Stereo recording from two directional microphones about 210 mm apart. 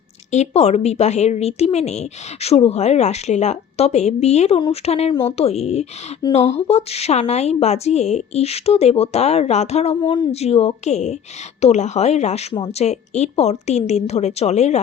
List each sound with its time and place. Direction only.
0.3 s speech: 30° left (ahead or behind)